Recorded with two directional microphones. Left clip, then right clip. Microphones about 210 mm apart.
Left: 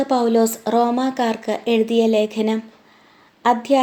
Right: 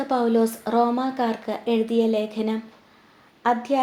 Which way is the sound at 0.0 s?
30° left (ahead or behind).